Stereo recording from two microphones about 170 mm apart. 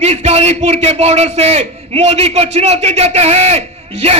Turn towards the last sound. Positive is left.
turn(degrees=-35)  # may be behind; listen again after turning